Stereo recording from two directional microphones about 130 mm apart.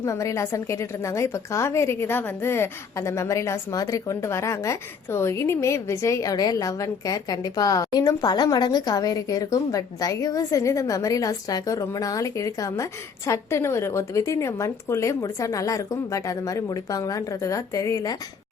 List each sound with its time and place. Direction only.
0.0 s a woman's voice: 25° left (ahead or behind)